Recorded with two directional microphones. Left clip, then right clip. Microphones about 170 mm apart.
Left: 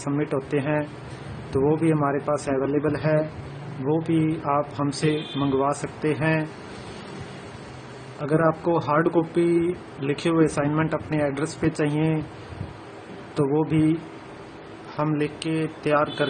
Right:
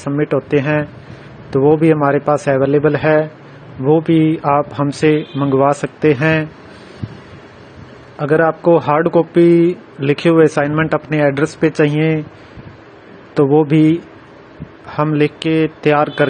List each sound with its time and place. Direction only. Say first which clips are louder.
0.0 s a man's voice: right 9 dB; 35° right (ahead or behind)
4.5 s a man's voice: right 9 dB; 40° right (ahead or behind)
8.2 s a man's voice: right 9 dB; 40° right (ahead or behind)
13.3 s a man's voice: right 11 dB; 35° right (ahead or behind)
15.0 s a man's voice: right 10 dB; 40° right (ahead or behind)